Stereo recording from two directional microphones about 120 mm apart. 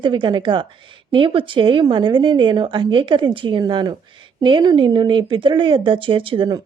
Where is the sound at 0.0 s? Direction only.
40° right (ahead or behind).